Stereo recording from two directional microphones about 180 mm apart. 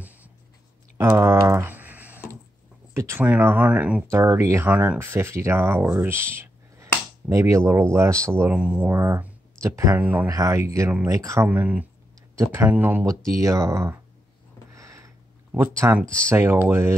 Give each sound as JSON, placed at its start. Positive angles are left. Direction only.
{"t": 0.9, "sound": "typing", "side_deg": -15}
{"t": 2.9, "sound": "speech", "side_deg": -15}
{"t": 14.8, "sound": "a sound", "side_deg": -15}
{"t": 16.3, "sound": "speech", "side_deg": -15}